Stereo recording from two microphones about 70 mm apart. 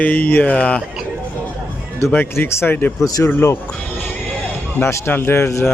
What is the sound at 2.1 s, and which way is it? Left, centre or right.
Speech, left.